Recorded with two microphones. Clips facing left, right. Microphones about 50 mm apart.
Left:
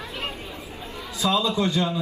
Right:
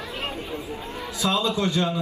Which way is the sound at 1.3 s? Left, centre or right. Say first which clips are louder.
Left 1 dB; right.